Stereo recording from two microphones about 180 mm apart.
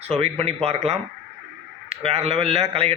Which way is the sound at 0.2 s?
35° right (ahead or behind).